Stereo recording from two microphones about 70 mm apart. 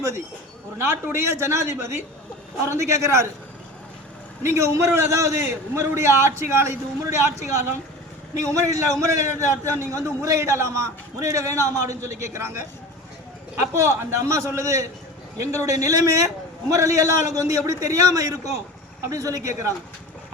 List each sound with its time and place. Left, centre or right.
0.8 s a man's voice: right
4.4 s a man's voice: right
13.7 s a man's voice: right